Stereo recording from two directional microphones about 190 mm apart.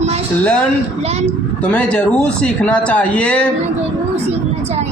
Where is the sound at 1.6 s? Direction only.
5° left (ahead or behind).